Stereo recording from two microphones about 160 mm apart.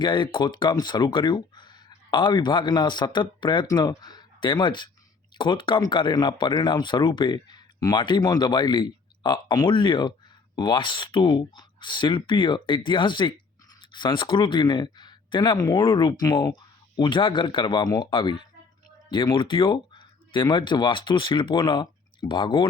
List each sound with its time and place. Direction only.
0.0 s speech: 30° left (ahead or behind)